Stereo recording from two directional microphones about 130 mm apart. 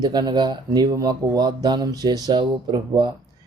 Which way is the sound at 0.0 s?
35° right (ahead or behind).